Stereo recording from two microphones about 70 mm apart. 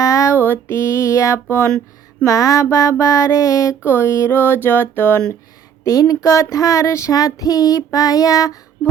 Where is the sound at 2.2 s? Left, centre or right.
Left.